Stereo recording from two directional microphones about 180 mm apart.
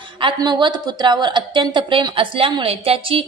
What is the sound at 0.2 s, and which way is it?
A woman's voice, 25° right (ahead or behind).